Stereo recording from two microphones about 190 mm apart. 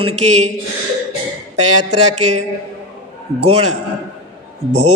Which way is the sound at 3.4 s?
35° right (ahead or behind).